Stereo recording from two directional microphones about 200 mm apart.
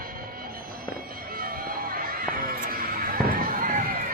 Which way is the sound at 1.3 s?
45° right (ahead or behind).